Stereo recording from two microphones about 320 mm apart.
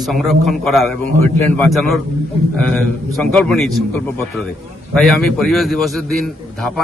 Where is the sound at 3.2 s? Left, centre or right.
Centre.